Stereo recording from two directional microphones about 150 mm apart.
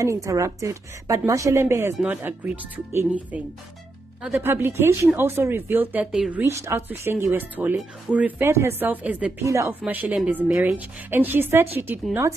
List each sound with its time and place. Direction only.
0.0 s a woman's voice: 20° right (ahead or behind)
6.4 s speech: 15° right (ahead or behind)